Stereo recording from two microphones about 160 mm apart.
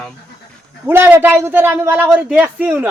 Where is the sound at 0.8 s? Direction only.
15° right (ahead or behind).